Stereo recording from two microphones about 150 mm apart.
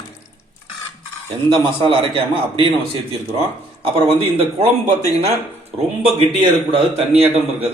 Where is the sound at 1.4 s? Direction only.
35° right (ahead or behind).